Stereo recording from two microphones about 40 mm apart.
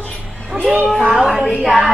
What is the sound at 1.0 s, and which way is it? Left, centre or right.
Speech, centre.